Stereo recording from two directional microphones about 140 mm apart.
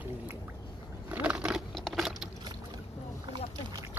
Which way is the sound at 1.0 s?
10° right (ahead or behind).